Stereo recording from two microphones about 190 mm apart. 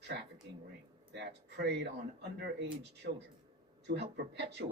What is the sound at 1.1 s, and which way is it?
Speech, 65° right (ahead or behind).